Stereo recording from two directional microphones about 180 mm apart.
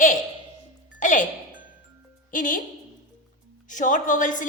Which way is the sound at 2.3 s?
50° left (ahead or behind).